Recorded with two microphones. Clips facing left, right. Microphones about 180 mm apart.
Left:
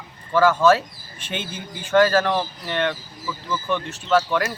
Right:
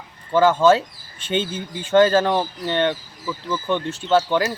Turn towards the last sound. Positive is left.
turn(degrees=-25)  # may be behind; listen again after turning